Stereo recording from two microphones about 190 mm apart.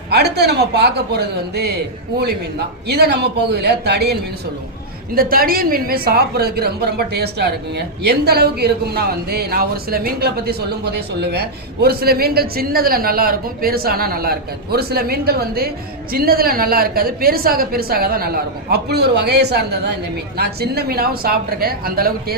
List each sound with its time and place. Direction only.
0.1 s a woman's voice: 60° right (ahead or behind)
2.8 s a woman's voice: 60° right (ahead or behind)